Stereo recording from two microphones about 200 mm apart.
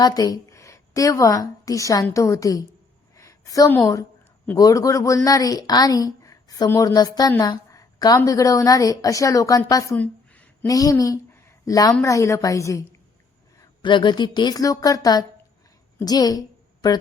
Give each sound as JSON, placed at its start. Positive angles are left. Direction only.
{"t": 0.0, "sound": "a woman's voice", "side_deg": 20}
{"t": 3.2, "sound": "a sound", "side_deg": 15}
{"t": 4.5, "sound": "a woman's voice", "side_deg": 15}